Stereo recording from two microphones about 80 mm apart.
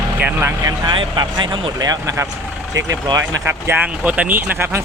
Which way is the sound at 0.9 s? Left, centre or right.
Right.